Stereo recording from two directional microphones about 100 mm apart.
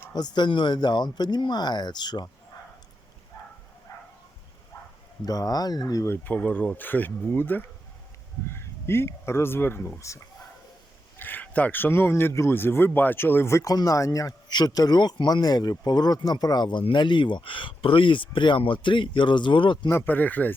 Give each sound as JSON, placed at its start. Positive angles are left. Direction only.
{"t": 0.1, "sound": "speech", "side_deg": 45}
{"t": 5.2, "sound": "a man's voice", "side_deg": 40}
{"t": 6.1, "sound": "a man's voice", "side_deg": 15}
{"t": 11.2, "sound": "a man's voice", "side_deg": 20}
{"t": 19.9, "sound": "speech", "side_deg": 20}